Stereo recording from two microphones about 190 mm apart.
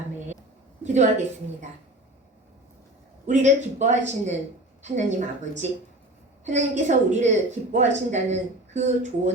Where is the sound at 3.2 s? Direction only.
40° right (ahead or behind).